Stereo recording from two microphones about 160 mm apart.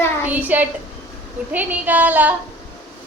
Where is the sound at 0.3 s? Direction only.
10° right (ahead or behind).